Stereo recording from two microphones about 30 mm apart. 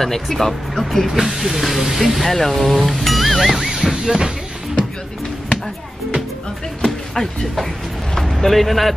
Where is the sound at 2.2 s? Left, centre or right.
Centre.